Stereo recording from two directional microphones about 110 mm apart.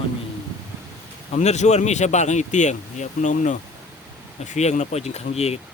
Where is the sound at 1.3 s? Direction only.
90° left; by 5.5 s 75° left (ahead or behind).